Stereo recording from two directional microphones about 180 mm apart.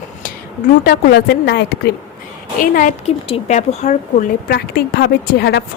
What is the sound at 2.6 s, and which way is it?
A woman's voice, 45° left (ahead or behind).